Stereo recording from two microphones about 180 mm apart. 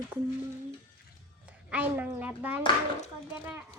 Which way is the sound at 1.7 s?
10° right (ahead or behind).